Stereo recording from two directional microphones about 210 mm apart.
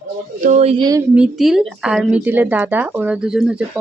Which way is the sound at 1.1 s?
5° right (ahead or behind).